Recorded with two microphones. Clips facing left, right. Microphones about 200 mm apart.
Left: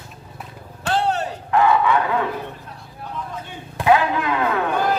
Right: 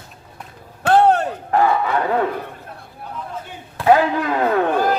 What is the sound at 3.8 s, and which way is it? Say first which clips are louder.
Speech: right 2 dB; 40° right (ahead or behind).